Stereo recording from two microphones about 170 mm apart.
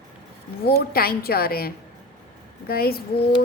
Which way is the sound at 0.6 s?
65° left (ahead or behind).